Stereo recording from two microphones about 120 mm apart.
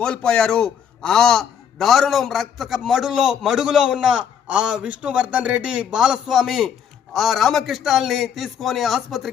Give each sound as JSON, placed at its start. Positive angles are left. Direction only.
{"t": 0.0, "sound": "a man's voice", "side_deg": 5}